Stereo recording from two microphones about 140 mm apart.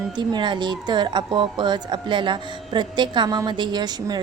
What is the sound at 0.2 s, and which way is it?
Speech, 35° right (ahead or behind).